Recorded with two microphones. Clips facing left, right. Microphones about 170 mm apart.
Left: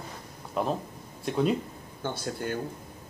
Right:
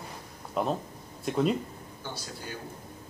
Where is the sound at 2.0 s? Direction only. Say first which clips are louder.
Left 9 dB; 55° left (ahead or behind).